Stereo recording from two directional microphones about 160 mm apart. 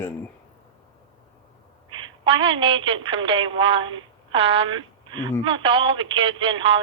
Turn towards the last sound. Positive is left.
turn(degrees=-35)  # may be behind; listen again after turning